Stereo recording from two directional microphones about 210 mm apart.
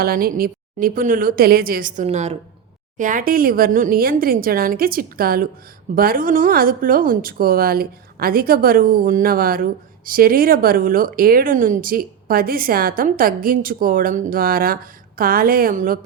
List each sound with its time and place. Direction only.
0.0 s a woman's voice: 45° right (ahead or behind)